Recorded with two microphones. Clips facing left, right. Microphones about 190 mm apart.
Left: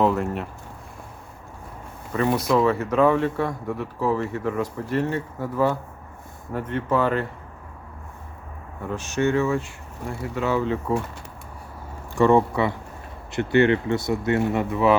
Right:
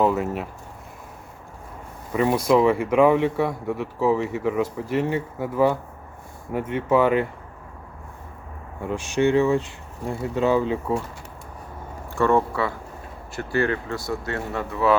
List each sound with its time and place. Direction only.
0.0 s speech: centre (ahead or behind)
2.1 s speech: 15° right (ahead or behind)
8.9 s speech: 15° right (ahead or behind)
12.1 s speech: 15° left (ahead or behind)